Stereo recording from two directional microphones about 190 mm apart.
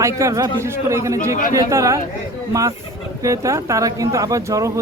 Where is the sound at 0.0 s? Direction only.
15° right (ahead or behind).